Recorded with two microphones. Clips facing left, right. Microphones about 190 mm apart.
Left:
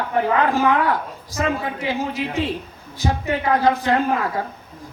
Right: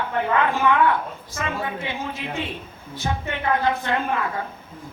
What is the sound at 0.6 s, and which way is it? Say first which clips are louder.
A woman's voice: left 1 dB; 40° left (ahead or behind).